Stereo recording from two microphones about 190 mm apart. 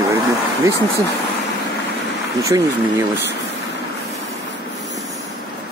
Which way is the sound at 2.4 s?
15° right (ahead or behind).